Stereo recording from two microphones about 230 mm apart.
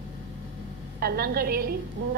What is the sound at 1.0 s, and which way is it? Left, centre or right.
Speech, right.